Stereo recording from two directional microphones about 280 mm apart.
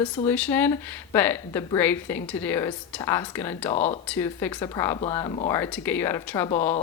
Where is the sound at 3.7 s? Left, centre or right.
Left.